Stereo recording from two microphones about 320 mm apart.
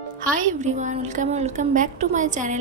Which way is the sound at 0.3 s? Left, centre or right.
Right.